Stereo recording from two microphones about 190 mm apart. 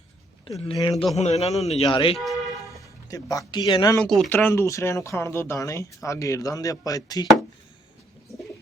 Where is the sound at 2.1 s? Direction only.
Centre (ahead or behind).